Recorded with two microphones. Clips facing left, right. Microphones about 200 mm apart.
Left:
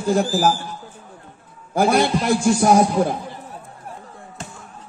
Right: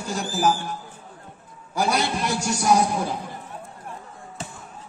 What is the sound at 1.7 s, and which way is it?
A man's voice, 50° left (ahead or behind).